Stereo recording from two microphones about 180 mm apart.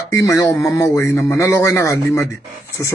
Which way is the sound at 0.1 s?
15° left (ahead or behind).